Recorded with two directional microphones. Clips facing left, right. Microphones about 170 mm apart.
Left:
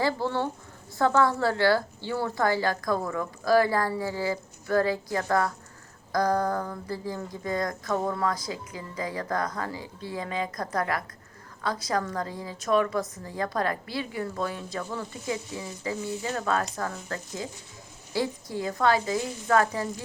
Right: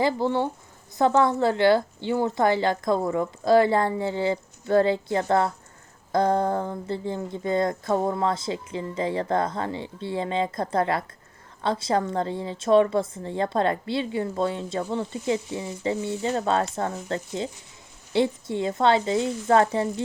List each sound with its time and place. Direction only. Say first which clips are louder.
0.0 s a woman's voice: right 4 dB; 20° right (ahead or behind)